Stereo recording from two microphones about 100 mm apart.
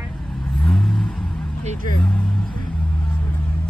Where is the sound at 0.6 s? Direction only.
10° left (ahead or behind).